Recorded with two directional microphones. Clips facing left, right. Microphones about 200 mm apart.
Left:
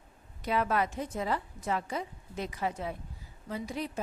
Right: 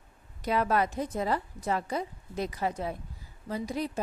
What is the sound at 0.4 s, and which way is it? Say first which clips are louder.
Speech: right 2 dB; 40° right (ahead or behind).